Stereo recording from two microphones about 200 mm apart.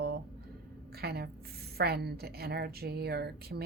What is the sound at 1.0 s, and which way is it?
A woman's voice, 50° right (ahead or behind).